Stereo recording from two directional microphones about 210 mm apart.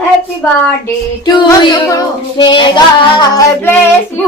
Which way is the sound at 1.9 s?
20° left (ahead or behind).